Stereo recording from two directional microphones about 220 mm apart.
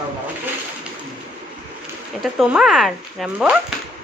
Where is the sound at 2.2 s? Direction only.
Centre (ahead or behind).